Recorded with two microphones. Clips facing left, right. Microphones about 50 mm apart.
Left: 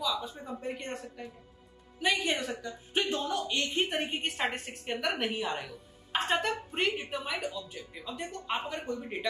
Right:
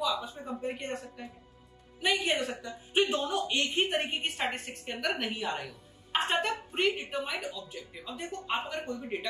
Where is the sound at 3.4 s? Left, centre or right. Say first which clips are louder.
Right 1 dB; right.